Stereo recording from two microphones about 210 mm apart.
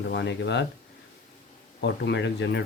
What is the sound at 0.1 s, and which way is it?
Speech, 55° left (ahead or behind).